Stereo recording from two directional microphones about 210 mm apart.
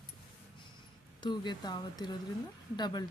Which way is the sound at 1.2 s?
20° left (ahead or behind).